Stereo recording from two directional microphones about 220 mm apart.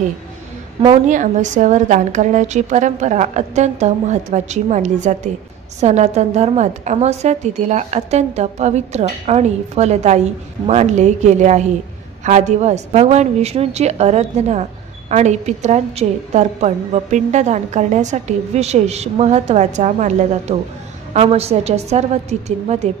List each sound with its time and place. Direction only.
1.0 s a woman's voice: 35° right (ahead or behind)